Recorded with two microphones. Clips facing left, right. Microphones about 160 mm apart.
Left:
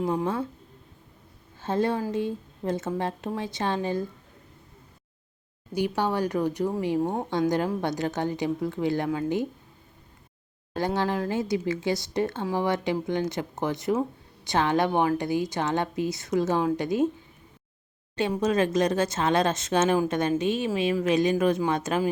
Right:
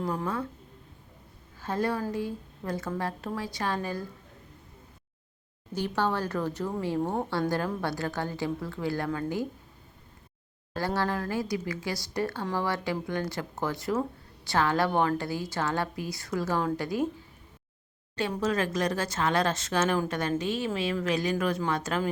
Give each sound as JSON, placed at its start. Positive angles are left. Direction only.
{"t": 0.0, "sound": "speech", "side_deg": 20}
{"t": 1.5, "sound": "a woman's voice", "side_deg": 25}
{"t": 6.0, "sound": "speech", "side_deg": 15}
{"t": 10.8, "sound": "speech", "side_deg": 20}
{"t": 18.2, "sound": "speech", "side_deg": 20}